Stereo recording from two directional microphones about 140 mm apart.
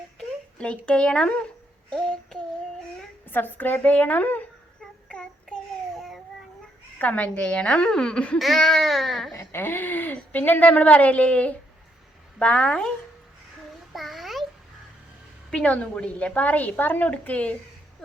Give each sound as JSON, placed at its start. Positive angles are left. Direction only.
{"t": 0.6, "sound": "speech", "side_deg": 10}
{"t": 3.2, "sound": "speech", "side_deg": 15}
{"t": 5.0, "sound": "child singing", "side_deg": 5}
{"t": 7.0, "sound": "speech", "side_deg": 10}
{"t": 9.3, "sound": "speech", "side_deg": 20}
{"t": 13.9, "sound": "a sound", "side_deg": 0}
{"t": 15.4, "sound": "speech", "side_deg": 10}